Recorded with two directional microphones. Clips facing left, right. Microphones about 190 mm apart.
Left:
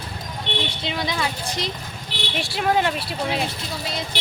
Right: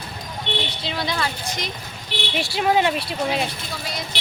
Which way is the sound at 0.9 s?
20° left (ahead or behind).